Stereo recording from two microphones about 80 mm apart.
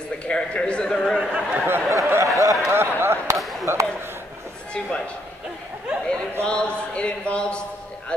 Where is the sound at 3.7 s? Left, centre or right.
Right.